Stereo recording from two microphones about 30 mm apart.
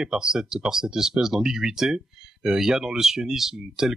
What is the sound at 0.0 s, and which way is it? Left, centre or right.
Speech, right.